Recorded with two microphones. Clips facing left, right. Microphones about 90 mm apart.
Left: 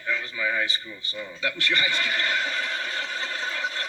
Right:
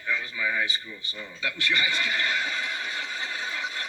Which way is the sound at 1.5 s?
15° right (ahead or behind).